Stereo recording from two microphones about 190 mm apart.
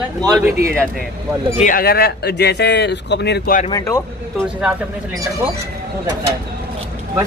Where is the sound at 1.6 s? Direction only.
50° left (ahead or behind).